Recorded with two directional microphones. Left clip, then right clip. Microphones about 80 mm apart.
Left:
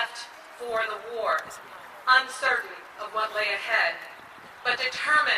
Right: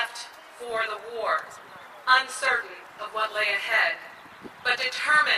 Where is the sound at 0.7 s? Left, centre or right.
Right.